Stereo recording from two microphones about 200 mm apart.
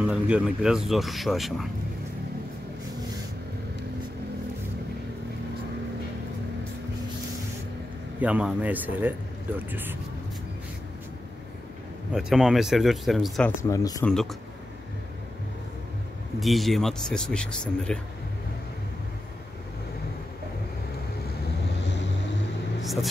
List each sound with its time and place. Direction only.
0.0 s speech: 5° right (ahead or behind)
8.2 s speech: 5° right (ahead or behind)
12.1 s speech: 5° right (ahead or behind)
13.6 s speech: 15° left (ahead or behind)
14.0 s speech: centre (ahead or behind)
16.3 s speech: centre (ahead or behind)